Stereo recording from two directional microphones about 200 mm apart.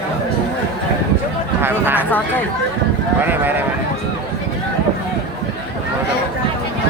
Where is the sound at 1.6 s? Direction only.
10° right (ahead or behind).